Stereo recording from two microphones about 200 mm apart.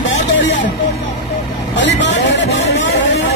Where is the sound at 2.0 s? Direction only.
60° left (ahead or behind).